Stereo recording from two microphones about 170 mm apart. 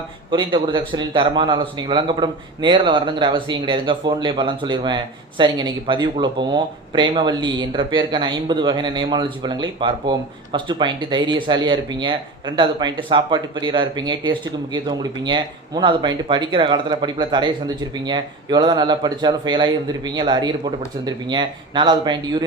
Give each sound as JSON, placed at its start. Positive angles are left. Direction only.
{"t": 0.3, "sound": "a man's voice", "side_deg": -25}